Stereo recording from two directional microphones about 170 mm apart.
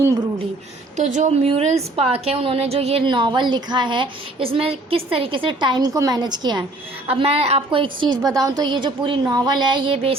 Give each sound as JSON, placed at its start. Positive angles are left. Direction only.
{"t": 0.9, "sound": "a woman's voice", "side_deg": -45}